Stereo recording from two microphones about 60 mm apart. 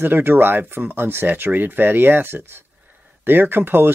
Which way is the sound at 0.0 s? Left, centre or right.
Right.